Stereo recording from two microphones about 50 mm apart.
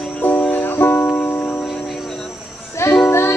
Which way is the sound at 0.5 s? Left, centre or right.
Left.